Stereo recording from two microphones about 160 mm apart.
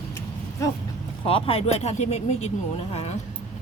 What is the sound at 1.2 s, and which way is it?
Speech, 35° left (ahead or behind).